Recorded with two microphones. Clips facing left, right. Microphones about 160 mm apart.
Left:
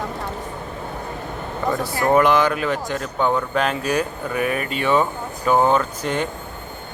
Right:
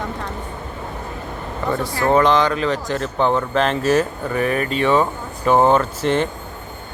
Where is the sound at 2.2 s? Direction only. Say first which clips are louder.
Right 1 dB; 10° left (ahead or behind).